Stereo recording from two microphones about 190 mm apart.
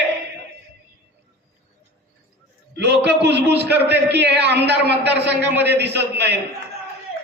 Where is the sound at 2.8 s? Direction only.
60° right (ahead or behind).